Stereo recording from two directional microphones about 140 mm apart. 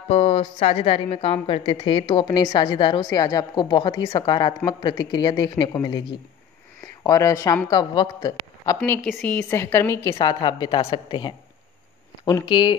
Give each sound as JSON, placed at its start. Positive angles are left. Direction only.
{"t": 0.1, "sound": "a woman's voice", "side_deg": 45}
{"t": 9.0, "sound": "a woman's voice", "side_deg": 10}
{"t": 10.1, "sound": "a woman's voice", "side_deg": 30}